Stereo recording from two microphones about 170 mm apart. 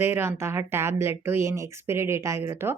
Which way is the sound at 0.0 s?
15° right (ahead or behind).